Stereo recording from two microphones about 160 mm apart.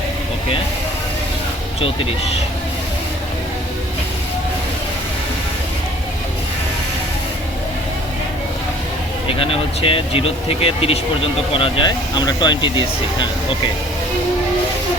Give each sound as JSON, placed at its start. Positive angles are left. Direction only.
{"t": 9.2, "sound": "speech", "side_deg": 35}